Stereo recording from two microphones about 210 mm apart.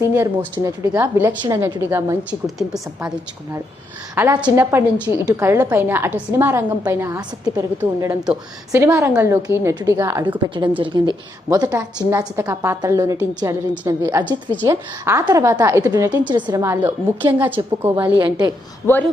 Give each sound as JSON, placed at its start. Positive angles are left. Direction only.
{"t": 0.0, "sound": "a woman's voice", "side_deg": -10}
{"t": 2.6, "sound": "a woman's voice", "side_deg": 0}
{"t": 4.1, "sound": "a woman's voice", "side_deg": -10}